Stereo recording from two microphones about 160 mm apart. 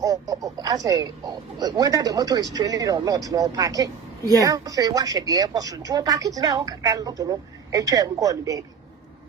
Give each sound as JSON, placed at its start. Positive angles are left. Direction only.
{"t": 0.0, "sound": "speech", "side_deg": -20}